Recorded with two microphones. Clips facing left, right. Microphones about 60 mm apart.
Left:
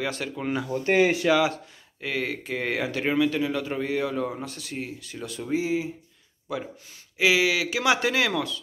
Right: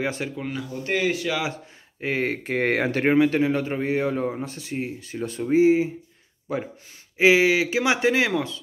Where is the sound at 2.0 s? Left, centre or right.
Right.